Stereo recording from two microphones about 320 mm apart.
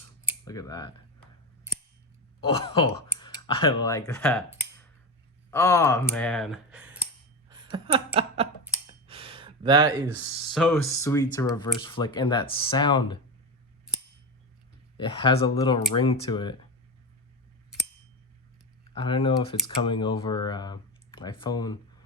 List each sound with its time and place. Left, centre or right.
0.4 s speech: centre
2.4 s speech: centre
5.5 s speech: centre
7.5 s a sound: centre
9.0 s speech: centre
14.9 s speech: centre
18.9 s speech: centre